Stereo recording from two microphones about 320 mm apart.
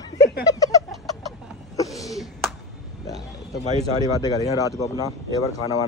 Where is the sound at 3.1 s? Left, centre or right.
Left.